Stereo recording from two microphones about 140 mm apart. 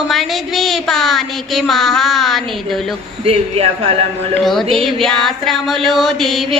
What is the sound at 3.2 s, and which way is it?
A man's voice, 45° right (ahead or behind).